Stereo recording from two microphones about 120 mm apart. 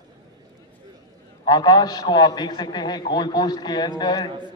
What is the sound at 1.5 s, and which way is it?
A man's voice, 35° left (ahead or behind).